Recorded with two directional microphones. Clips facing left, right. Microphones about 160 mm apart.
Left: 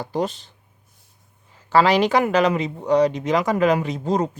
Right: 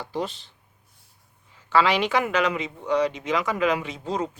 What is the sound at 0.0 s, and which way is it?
Speech, 45° left (ahead or behind).